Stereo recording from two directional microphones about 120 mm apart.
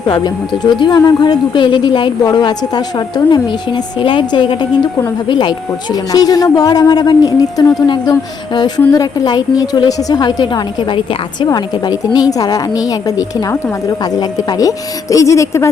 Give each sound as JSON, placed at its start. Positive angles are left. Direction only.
{"t": 0.6, "sound": "a woman's voice", "side_deg": 40}
{"t": 11.4, "sound": "a woman's voice", "side_deg": 35}